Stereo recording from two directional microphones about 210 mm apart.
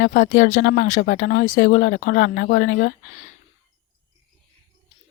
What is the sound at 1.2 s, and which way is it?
Speech, 45° left (ahead or behind).